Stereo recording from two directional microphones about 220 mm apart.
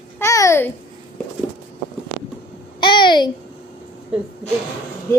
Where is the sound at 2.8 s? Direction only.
20° left (ahead or behind).